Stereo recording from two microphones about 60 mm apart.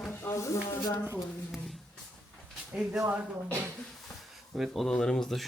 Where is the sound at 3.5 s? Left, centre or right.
Right.